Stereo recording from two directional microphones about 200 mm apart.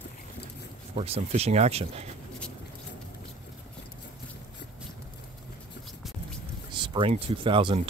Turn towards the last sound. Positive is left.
turn(degrees=-25)  # may be behind; listen again after turning